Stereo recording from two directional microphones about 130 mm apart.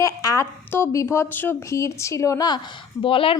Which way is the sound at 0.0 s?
25° left (ahead or behind).